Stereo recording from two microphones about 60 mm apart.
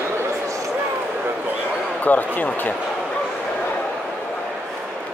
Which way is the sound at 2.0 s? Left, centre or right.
Left.